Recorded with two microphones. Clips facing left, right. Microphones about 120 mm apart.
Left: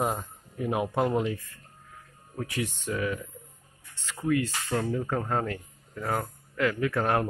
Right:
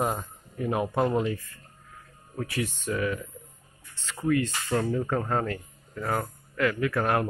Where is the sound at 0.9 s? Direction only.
10° left (ahead or behind).